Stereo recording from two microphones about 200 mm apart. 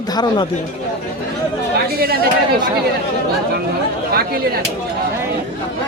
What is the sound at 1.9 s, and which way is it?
Speech, 50° right (ahead or behind).